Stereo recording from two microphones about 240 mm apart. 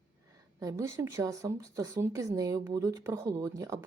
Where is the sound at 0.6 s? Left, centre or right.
Centre.